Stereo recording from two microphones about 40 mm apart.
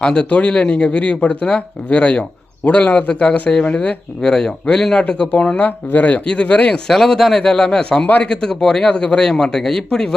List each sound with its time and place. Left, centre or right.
0.0 s a man's voice: left
6.8 s speech: centre